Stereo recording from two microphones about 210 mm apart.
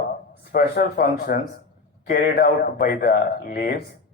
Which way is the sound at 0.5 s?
45° left (ahead or behind).